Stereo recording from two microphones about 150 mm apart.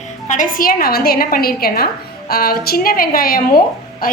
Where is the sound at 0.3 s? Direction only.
65° left (ahead or behind).